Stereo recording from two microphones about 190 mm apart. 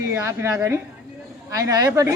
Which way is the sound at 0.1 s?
15° right (ahead or behind).